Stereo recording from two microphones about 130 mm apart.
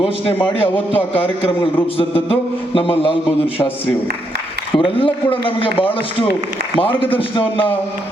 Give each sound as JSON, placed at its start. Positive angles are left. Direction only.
{"t": 0.4, "sound": "mantra", "side_deg": 45}
{"t": 4.8, "sound": "speech", "side_deg": 40}
{"t": 5.5, "sound": "mantra", "side_deg": 45}